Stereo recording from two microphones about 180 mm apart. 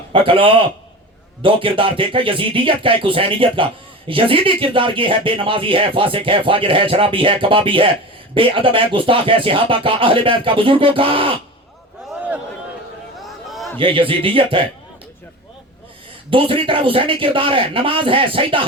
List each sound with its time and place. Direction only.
0.1 s speech: 30° right (ahead or behind)
13.2 s a sound: centre (ahead or behind)
13.7 s speech: 30° right (ahead or behind)
16.3 s speech: 30° right (ahead or behind)